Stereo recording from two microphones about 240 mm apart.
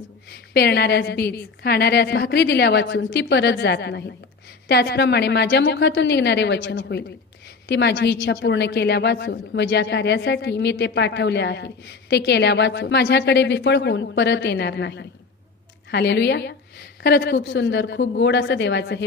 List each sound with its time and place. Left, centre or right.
0.3 s a man's voice: left